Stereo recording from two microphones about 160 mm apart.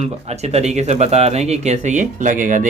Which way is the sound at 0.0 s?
40° right (ahead or behind).